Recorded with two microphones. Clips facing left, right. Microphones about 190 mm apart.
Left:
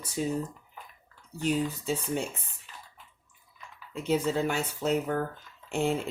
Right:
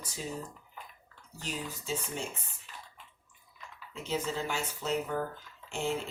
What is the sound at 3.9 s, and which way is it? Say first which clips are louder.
Speech: left 7 dB; 55° left (ahead or behind).